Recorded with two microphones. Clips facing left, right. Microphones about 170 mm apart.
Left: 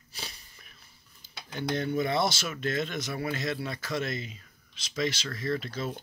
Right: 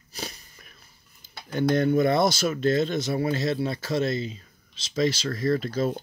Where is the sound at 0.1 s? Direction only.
45° right (ahead or behind).